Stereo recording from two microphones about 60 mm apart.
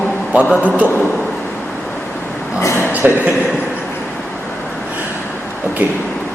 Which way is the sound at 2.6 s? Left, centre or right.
Left.